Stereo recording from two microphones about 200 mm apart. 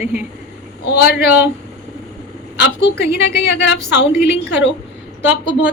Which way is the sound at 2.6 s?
55° left (ahead or behind).